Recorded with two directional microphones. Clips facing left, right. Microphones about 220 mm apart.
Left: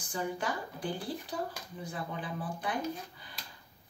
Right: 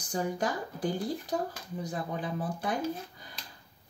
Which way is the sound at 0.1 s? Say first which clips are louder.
Right 4 dB; 45° right (ahead or behind).